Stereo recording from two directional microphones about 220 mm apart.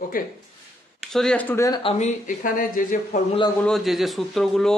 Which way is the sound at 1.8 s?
30° left (ahead or behind).